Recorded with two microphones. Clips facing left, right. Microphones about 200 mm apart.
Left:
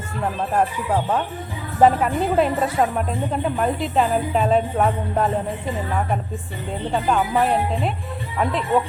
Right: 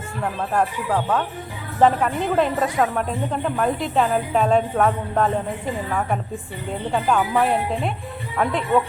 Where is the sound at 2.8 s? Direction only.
15° left (ahead or behind).